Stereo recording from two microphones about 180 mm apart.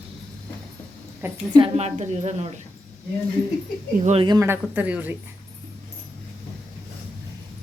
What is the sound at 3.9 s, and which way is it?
Speech, 40° right (ahead or behind).